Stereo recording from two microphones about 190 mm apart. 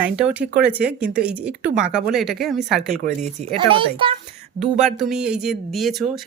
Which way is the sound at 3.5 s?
25° right (ahead or behind).